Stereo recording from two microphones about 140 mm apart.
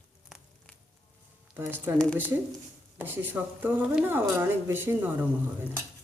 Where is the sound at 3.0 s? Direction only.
15° right (ahead or behind).